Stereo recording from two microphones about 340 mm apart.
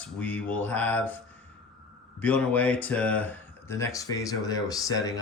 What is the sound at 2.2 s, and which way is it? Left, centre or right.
Speech, centre.